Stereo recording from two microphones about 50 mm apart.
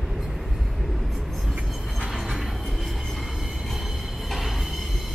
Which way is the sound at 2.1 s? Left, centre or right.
Centre.